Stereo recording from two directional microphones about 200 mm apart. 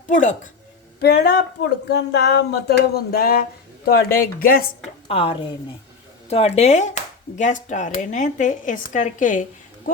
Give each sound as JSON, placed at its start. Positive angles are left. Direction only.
{"t": 0.1, "sound": "speech", "side_deg": 40}
{"t": 1.0, "sound": "a sound", "side_deg": 55}
{"t": 5.0, "sound": "speech", "side_deg": 30}